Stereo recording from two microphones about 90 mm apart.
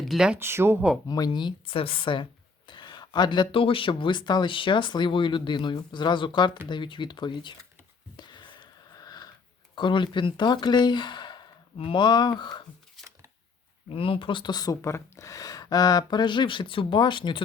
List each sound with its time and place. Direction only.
0.0 s a sound: centre (ahead or behind)
0.3 s speech: 25° right (ahead or behind)
1.0 s speech: 45° left (ahead or behind); by 2.2 s 70° left (ahead or behind)
2.6 s speech: 55° left (ahead or behind)
8.1 s a sound: 55° left (ahead or behind)
9.0 s wheeze: 45° left (ahead or behind)
9.7 s speech: 60° left (ahead or behind)
11.8 s speech: 75° left (ahead or behind); by 12.6 s 55° left (ahead or behind)
13.9 s speech: 85° left; by 14.8 s 45° left (ahead or behind)
14.8 s speech: 30° left (ahead or behind); by 17.4 s 65° left (ahead or behind)